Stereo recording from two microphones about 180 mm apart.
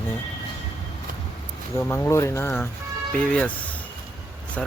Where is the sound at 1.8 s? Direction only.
10° left (ahead or behind).